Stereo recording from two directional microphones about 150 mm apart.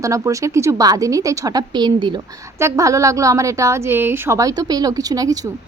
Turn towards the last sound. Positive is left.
turn(degrees=-25)  # may be behind; listen again after turning